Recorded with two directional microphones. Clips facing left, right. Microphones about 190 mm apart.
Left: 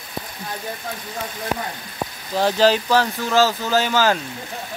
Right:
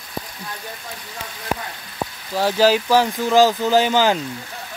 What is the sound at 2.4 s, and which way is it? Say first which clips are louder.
Speech: even; 10° right (ahead or behind).